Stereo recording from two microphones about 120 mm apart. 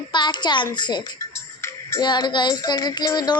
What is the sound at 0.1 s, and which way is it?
Child singing, 40° left (ahead or behind).